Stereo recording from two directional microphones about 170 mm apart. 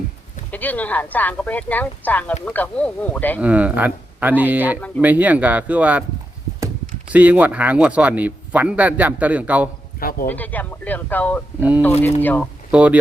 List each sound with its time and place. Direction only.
0.5 s speech: 10° left (ahead or behind)
3.4 s speech: 10° right (ahead or behind)
7.1 s speech: 10° right (ahead or behind)
10.0 s a man's voice: 60° left (ahead or behind)
10.2 s speech: 10° left (ahead or behind)
12.7 s speech: 10° right (ahead or behind)